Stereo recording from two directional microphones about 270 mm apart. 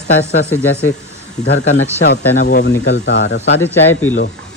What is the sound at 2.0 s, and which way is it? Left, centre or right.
Speech, left.